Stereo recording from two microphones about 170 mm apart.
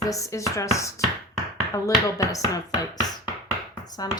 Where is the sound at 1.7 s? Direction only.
20° left (ahead or behind).